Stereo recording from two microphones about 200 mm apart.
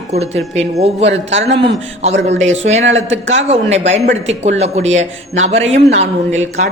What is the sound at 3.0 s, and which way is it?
Speech, 70° right (ahead or behind).